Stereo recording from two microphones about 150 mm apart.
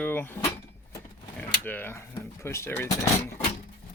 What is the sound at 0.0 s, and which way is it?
Speech, 15° left (ahead or behind).